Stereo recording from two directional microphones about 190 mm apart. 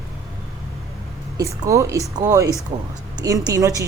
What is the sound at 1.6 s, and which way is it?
A woman's voice, 15° right (ahead or behind).